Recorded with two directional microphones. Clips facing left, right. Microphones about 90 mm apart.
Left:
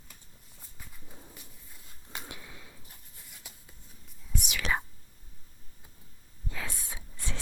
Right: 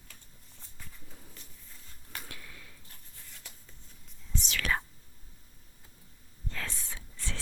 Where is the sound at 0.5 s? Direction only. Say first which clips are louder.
Even; 10° left (ahead or behind).